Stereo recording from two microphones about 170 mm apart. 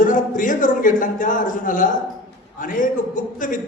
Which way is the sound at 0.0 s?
50° left (ahead or behind).